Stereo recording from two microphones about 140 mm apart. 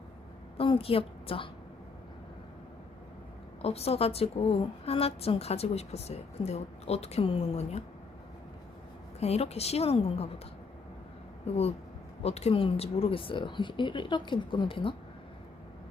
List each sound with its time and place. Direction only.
0.5 s a woman's voice: 40° left (ahead or behind)
3.6 s a woman's voice: 45° left (ahead or behind)
9.2 s a woman's voice: 50° left (ahead or behind)
11.4 s a woman's voice: 45° left (ahead or behind)